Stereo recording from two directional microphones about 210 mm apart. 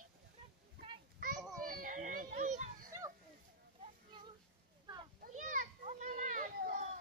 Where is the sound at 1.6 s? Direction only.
40° right (ahead or behind).